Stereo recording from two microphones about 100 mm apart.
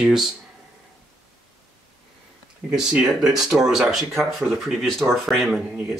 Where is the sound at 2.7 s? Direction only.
10° right (ahead or behind).